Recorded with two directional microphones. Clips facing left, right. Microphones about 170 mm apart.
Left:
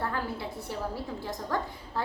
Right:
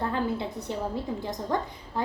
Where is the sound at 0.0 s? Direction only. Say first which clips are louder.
Right 4 dB; 20° right (ahead or behind).